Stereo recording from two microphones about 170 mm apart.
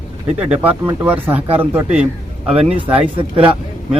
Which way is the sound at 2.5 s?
35° right (ahead or behind).